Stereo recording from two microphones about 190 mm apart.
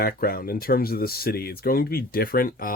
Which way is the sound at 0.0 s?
50° left (ahead or behind).